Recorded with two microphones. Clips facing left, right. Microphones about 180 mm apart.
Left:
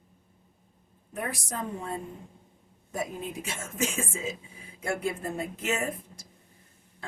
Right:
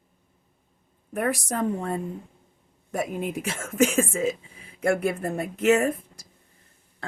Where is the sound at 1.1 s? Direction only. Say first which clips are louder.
Right 8 dB; 65° right (ahead or behind).